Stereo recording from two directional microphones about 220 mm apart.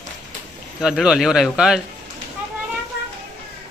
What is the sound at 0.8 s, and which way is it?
Speech, centre (ahead or behind).